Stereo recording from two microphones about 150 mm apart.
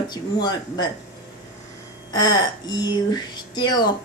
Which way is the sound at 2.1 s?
25° left (ahead or behind).